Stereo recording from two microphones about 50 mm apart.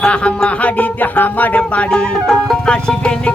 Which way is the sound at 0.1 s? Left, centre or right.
Left.